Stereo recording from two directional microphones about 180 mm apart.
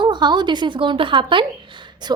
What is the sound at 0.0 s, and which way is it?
A woman's voice, 25° right (ahead or behind).